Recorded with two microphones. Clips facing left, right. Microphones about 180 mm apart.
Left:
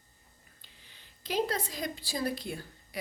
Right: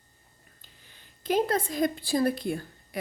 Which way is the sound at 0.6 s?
50° right (ahead or behind).